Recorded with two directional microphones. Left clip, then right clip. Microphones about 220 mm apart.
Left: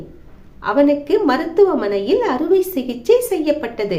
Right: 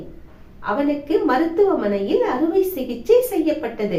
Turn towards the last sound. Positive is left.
turn(degrees=50)  # may be behind; listen again after turning